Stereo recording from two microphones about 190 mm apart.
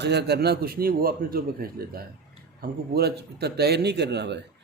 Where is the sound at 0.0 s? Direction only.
60° right (ahead or behind).